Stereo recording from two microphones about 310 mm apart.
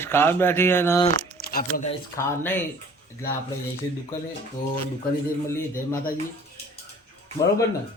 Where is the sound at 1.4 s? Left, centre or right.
Left.